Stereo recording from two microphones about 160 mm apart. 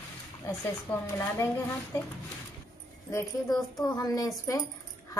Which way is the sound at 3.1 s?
20° left (ahead or behind).